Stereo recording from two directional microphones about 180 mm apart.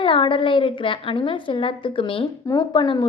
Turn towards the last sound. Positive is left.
turn(degrees=25)  # may be behind; listen again after turning